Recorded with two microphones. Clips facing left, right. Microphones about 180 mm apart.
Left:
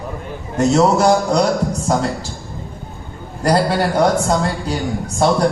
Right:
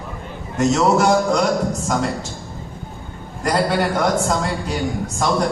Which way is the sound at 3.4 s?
35° left (ahead or behind).